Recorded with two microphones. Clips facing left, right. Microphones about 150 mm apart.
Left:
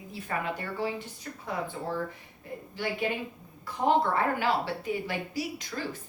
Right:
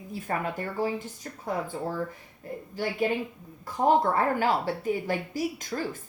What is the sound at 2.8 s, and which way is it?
Speech, 45° right (ahead or behind).